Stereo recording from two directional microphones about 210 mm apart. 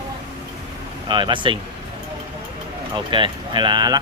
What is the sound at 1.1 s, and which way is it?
Speech, 20° right (ahead or behind).